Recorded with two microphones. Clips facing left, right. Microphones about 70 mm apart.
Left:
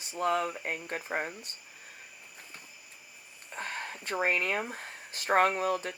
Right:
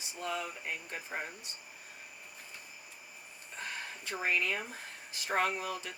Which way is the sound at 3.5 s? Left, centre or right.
Left.